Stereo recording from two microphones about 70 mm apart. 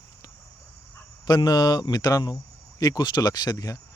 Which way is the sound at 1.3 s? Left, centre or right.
Left.